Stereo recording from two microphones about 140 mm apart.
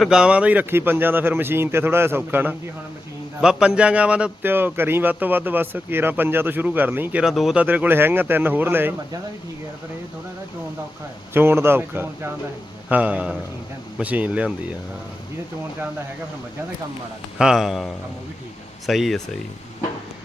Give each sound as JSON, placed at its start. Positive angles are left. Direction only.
{"t": 0.0, "sound": "speech", "side_deg": -5}
{"t": 11.3, "sound": "speech", "side_deg": -15}
{"t": 17.3, "sound": "speech", "side_deg": -5}